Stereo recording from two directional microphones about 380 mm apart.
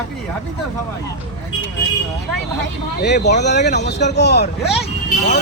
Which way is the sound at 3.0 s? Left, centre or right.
Left.